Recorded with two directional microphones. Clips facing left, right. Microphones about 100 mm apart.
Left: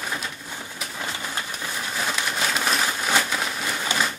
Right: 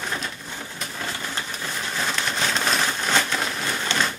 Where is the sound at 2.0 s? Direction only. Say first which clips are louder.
Even; 5° left (ahead or behind).